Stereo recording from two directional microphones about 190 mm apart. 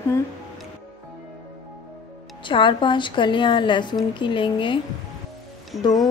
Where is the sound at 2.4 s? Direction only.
25° left (ahead or behind).